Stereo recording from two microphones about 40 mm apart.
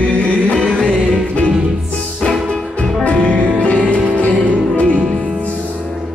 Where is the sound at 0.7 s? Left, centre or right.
Left.